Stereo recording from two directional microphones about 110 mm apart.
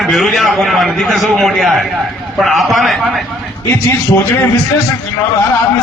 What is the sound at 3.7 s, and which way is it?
Speech, 25° left (ahead or behind).